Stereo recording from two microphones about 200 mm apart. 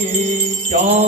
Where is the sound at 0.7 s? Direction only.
35° right (ahead or behind).